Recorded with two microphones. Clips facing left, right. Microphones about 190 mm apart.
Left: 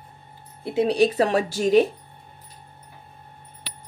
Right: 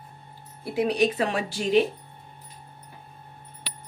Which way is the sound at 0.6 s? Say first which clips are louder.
Left 3 dB; 30° left (ahead or behind).